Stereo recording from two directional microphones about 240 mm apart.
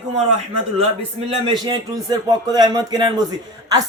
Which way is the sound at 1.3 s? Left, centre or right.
Centre.